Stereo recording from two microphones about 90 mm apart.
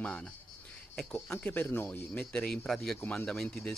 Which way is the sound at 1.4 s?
20° left (ahead or behind).